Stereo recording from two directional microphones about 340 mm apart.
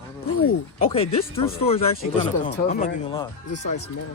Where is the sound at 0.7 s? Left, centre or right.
Centre.